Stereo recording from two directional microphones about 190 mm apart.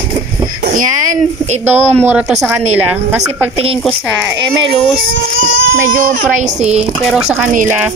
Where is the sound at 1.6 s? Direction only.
10° right (ahead or behind).